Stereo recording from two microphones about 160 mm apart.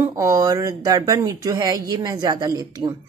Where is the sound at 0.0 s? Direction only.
20° right (ahead or behind).